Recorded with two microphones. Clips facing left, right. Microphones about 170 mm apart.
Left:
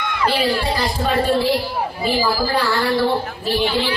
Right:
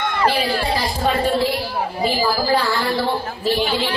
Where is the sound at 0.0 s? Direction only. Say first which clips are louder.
Right 2 dB; 50° right (ahead or behind).